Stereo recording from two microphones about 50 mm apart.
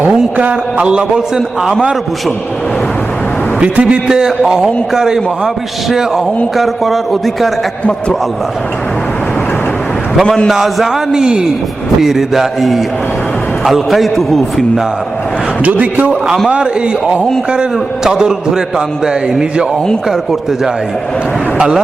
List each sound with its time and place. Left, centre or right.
0.0 s a man's voice: right
3.6 s a man's voice: right
4.0 s a man's voice: centre
10.2 s a man's voice: centre
10.5 s a man's voice: centre
15.6 s a man's voice: right
17.5 s a man's voice: centre